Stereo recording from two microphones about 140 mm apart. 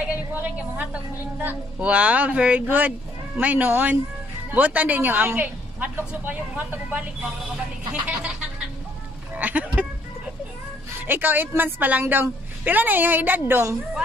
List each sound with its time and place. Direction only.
0.3 s a woman's voice: 15° right (ahead or behind)
11.0 s a woman's voice: 15° right (ahead or behind)